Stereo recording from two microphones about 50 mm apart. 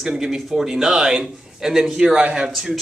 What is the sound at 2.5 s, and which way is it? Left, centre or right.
Speech, centre.